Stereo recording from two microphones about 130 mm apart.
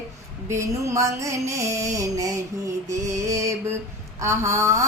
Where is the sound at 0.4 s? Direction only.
20° right (ahead or behind).